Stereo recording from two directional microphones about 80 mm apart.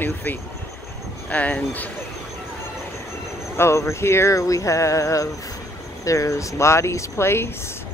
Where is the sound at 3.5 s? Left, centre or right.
Left.